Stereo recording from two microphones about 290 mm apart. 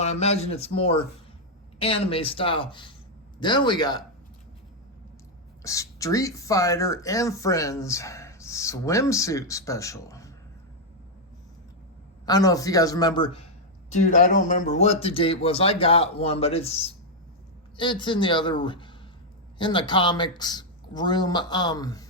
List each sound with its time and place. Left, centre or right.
0.0 s speech: left
5.6 s speech: centre
12.2 s speech: centre